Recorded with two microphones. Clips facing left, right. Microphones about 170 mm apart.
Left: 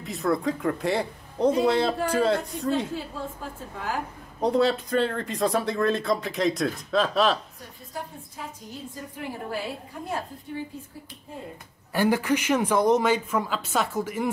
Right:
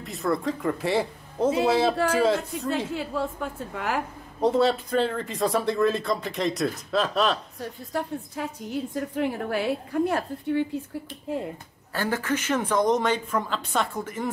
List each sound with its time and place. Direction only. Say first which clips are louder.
0.0 s speech: left 1 dB; centre (ahead or behind)
2.9 s a woman's voice: right 4 dB; 75° right (ahead or behind)
4.4 s speech: right 1 dB; centre (ahead or behind)
7.9 s a woman's voice: right 7 dB; 75° right (ahead or behind)
11.9 s speech: left 4 dB; 15° left (ahead or behind)